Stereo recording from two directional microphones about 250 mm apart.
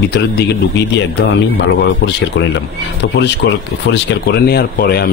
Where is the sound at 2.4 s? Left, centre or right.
Left.